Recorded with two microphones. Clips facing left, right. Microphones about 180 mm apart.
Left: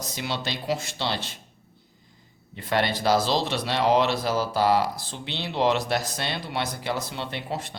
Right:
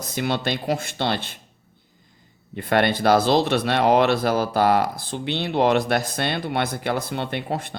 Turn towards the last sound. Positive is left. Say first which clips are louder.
# right 5 dB
turn(degrees=-55)  # may be behind; listen again after turning